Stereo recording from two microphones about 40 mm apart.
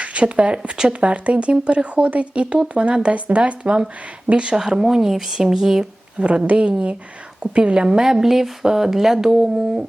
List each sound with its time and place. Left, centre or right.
0.0 s a woman's voice: right; by 5.9 s centre
6.1 s a woman's voice: right; by 9.6 s centre